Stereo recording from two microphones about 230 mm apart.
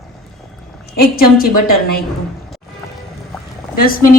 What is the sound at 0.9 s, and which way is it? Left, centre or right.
Speech, left.